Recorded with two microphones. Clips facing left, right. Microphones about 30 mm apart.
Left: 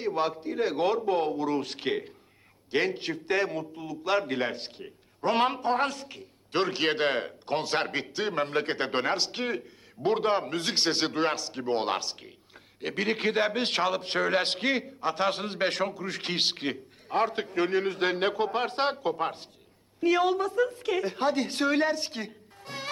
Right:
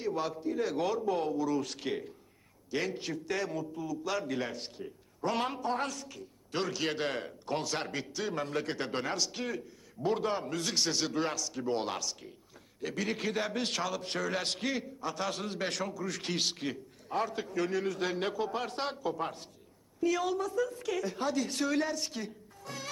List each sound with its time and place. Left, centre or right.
0.0 s a man's voice: left